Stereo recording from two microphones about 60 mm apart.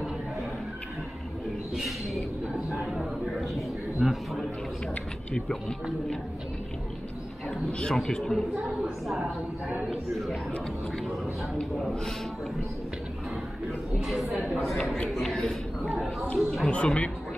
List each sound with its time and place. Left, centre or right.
1.8 s a sound: centre
4.0 s a sound: centre
5.3 s speech: centre
7.8 s a woman's voice: centre
14.0 s a woman's voice: centre
16.7 s speech: centre